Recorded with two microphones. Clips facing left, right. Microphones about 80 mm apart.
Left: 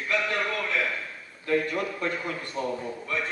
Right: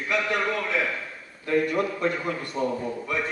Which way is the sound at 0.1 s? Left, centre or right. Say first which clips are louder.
Right 2 dB; centre.